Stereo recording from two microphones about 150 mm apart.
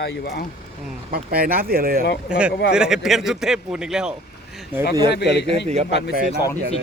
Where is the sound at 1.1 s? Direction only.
80° right.